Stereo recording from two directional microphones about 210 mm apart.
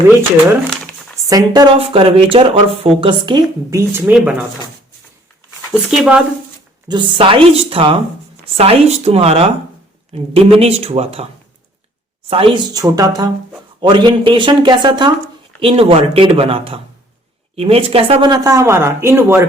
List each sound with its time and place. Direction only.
1.3 s speech: 20° right (ahead or behind)
6.0 s speech: 5° right (ahead or behind)
6.8 s speech: 20° right (ahead or behind)
12.3 s speech: 25° right (ahead or behind)